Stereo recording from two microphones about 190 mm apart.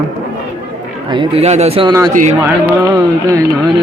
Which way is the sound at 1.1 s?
30° right (ahead or behind).